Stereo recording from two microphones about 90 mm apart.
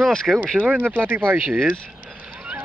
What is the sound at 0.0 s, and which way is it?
Speech, 5° left (ahead or behind).